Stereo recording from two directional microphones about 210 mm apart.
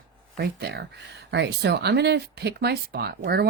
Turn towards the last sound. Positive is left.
turn(degrees=-50)  # may be behind; listen again after turning